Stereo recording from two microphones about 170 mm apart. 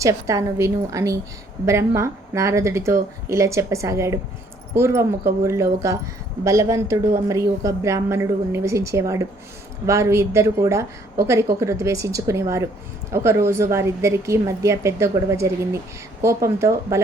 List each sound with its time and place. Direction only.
0.0 s a woman's voice: 20° right (ahead or behind)